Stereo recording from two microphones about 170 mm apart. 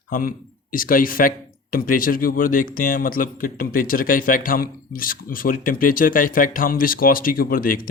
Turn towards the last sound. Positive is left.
turn(degrees=55)  # may be behind; listen again after turning